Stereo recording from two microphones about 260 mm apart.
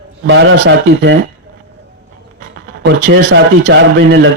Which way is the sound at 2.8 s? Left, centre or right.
Right.